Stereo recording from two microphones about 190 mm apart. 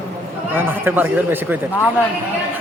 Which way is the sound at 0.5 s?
10° right (ahead or behind).